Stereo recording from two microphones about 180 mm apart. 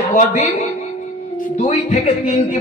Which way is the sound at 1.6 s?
35° left (ahead or behind).